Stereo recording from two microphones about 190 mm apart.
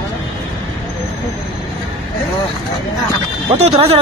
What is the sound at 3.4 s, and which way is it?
Speech, 35° right (ahead or behind).